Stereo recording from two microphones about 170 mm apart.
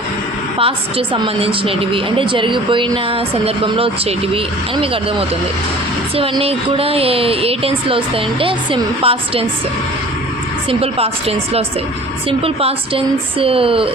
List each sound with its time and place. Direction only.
0.6 s a woman's voice: 30° right (ahead or behind)
6.1 s a woman's voice: 35° right (ahead or behind)
10.7 s a woman's voice: 35° right (ahead or behind)